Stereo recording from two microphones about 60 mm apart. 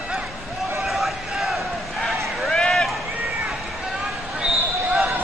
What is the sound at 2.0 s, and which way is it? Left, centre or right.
Run, centre.